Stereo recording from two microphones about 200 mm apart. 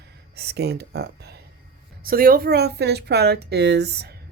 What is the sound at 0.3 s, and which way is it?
A woman's voice, 55° right (ahead or behind).